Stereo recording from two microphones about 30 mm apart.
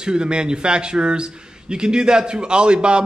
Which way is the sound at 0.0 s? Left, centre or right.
Right.